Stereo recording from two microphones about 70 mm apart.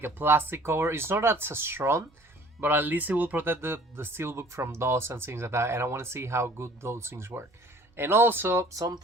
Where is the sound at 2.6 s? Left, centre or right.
Right.